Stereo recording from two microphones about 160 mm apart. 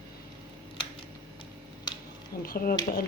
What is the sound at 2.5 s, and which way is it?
Speech, 65° left (ahead or behind).